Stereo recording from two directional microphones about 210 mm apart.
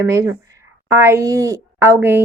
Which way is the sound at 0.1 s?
15° right (ahead or behind).